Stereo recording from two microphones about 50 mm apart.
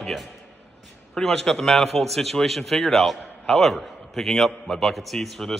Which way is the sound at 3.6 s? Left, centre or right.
Centre.